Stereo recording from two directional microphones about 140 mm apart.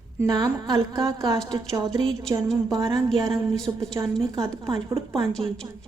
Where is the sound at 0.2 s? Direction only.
25° right (ahead or behind).